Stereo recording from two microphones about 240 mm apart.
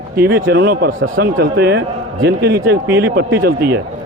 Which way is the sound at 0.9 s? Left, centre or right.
Right.